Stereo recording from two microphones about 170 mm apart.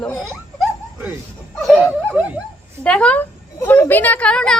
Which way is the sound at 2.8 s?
5° left (ahead or behind).